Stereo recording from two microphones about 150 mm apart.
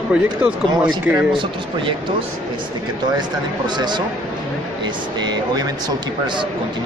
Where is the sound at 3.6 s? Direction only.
30° right (ahead or behind).